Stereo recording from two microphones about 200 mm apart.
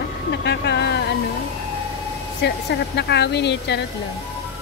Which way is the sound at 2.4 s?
55° left (ahead or behind).